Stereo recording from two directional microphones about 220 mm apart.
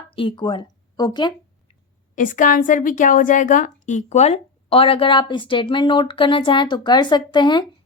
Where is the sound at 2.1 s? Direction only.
35° left (ahead or behind).